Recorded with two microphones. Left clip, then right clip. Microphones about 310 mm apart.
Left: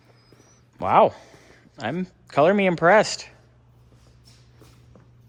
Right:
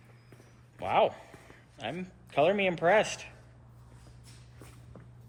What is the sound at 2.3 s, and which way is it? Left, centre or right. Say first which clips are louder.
Speech: left 8 dB; left.